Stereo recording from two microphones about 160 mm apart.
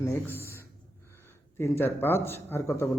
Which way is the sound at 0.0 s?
15° left (ahead or behind).